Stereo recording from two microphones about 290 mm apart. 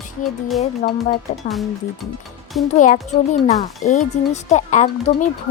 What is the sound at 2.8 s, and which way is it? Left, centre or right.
Speech, left.